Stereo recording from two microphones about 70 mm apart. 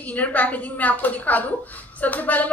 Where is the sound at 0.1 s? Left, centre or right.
Left.